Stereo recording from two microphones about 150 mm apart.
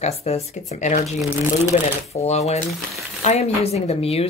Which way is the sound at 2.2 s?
45° left (ahead or behind).